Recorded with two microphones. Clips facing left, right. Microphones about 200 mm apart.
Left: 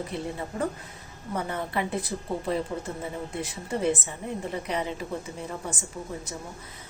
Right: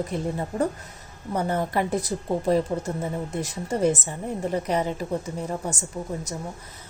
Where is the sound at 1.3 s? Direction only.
40° right (ahead or behind).